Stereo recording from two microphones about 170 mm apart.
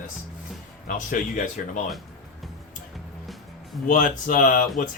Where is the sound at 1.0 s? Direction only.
50° left (ahead or behind).